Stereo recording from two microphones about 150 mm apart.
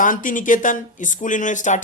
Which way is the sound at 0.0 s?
60° left (ahead or behind).